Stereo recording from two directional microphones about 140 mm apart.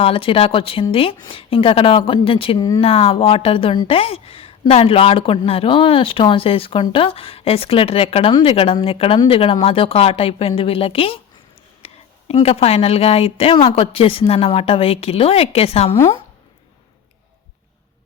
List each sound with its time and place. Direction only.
0.0 s speech: 40° left (ahead or behind)
2.6 s speech: 30° left (ahead or behind)
2.8 s a woman's voice: 45° left (ahead or behind)
12.3 s a woman's voice: 45° left (ahead or behind)